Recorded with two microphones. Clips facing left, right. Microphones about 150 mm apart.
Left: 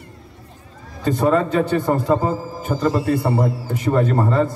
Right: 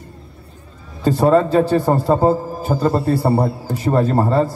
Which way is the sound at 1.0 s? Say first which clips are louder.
Right 4 dB; 35° right (ahead or behind).